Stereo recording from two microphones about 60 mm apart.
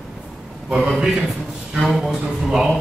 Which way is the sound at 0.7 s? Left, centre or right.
Centre.